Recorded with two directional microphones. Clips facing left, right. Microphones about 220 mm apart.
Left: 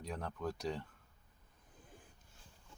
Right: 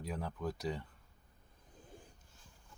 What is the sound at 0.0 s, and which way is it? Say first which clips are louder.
Speech: right 1 dB; 5° right (ahead or behind).